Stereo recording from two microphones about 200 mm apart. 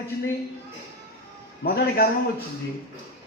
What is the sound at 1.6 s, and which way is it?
Speech, 50° left (ahead or behind).